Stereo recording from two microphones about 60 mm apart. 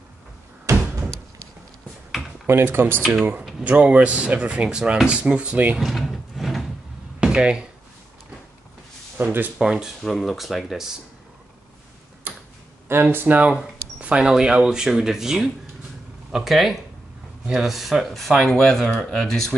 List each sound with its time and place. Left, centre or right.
0.7 s door: right
2.4 s speech: right
3.6 s speech: right
5.8 s a sound: centre
7.2 s a sound: centre
9.2 s speech: right
9.6 s speech: centre
10.0 s speech: centre
12.8 s speech: right
13.9 s speech: centre